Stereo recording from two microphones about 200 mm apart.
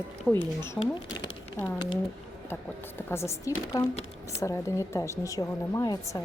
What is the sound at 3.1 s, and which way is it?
A woman's voice, 15° left (ahead or behind).